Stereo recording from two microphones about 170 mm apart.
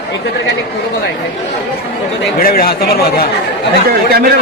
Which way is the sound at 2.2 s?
60° left (ahead or behind).